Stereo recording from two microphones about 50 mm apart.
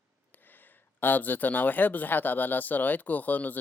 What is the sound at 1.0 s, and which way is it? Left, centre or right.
Speech, left.